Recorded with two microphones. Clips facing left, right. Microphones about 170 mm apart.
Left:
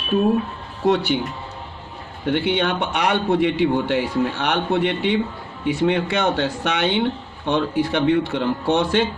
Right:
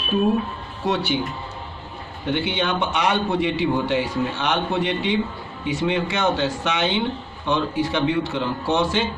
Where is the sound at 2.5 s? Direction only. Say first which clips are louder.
Left 1 dB; 65° left (ahead or behind).